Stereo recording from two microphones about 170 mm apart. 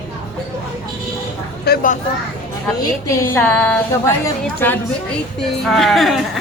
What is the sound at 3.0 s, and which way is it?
A woman's voice, 15° left (ahead or behind).